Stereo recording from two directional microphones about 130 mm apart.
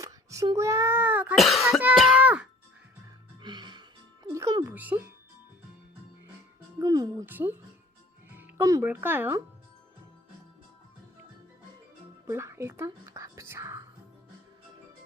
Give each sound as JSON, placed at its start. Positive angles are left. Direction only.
{"t": 0.0, "sound": "sneeze", "side_deg": -25}
{"t": 1.4, "sound": "cough", "side_deg": 0}
{"t": 2.0, "sound": "a sound", "side_deg": -5}
{"t": 3.4, "sound": "music", "side_deg": -35}
{"t": 4.3, "sound": "music", "side_deg": -20}
{"t": 6.7, "sound": "music", "side_deg": -30}
{"t": 7.3, "sound": "a child's voice", "side_deg": -15}
{"t": 12.2, "sound": "whispering", "side_deg": -20}